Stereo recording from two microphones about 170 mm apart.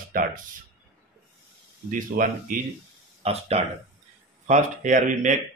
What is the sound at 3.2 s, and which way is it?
Speech, 35° right (ahead or behind).